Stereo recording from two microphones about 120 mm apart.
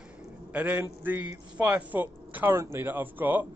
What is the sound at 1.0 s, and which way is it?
Speech, 15° right (ahead or behind).